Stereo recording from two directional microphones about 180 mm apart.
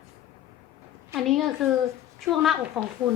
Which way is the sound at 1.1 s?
Centre (ahead or behind).